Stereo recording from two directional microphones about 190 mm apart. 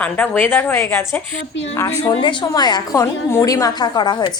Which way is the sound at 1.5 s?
75° left (ahead or behind).